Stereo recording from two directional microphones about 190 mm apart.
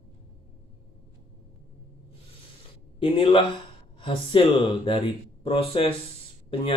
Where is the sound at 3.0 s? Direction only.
25° left (ahead or behind).